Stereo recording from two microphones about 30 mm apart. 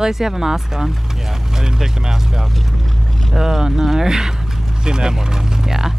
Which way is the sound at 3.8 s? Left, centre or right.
Centre.